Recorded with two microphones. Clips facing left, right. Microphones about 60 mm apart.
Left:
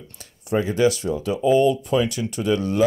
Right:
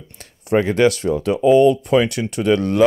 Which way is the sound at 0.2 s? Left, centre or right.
Right.